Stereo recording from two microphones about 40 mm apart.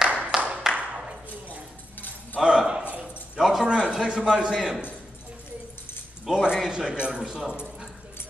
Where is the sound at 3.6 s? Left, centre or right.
Right.